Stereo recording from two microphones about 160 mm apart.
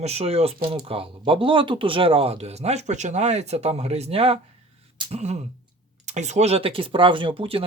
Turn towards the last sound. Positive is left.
turn(degrees=-35)  # may be behind; listen again after turning